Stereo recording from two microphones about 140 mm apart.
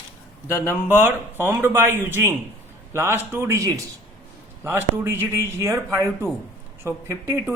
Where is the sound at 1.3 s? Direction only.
15° right (ahead or behind).